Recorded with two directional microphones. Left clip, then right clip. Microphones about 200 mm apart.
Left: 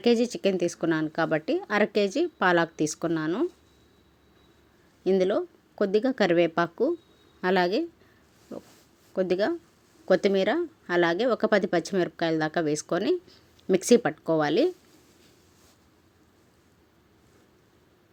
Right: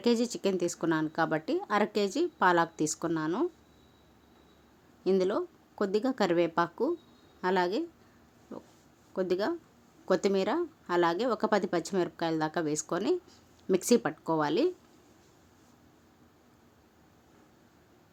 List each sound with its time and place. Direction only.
0.0 s a woman's voice: 10° left (ahead or behind)
5.0 s a woman's voice: 10° left (ahead or behind)
9.1 s a woman's voice: 10° left (ahead or behind)